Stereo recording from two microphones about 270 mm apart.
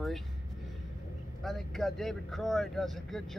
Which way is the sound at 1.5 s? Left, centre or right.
Centre.